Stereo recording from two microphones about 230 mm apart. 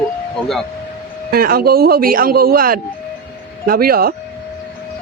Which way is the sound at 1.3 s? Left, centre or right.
Right.